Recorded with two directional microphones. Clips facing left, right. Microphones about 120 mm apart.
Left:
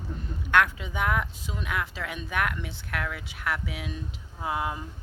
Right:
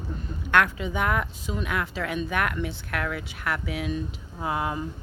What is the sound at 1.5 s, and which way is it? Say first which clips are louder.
Speech: right 6 dB; centre (ahead or behind).